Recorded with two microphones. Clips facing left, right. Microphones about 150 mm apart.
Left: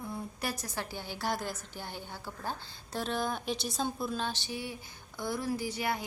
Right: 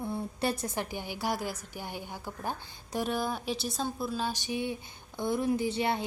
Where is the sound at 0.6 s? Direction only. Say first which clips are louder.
Right 4 dB; 20° right (ahead or behind).